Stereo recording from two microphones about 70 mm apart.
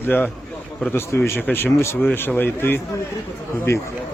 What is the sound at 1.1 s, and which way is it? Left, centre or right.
A man's voice, left.